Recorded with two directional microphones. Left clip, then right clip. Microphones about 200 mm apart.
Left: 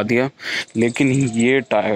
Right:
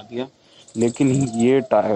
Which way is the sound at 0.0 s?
55° left (ahead or behind).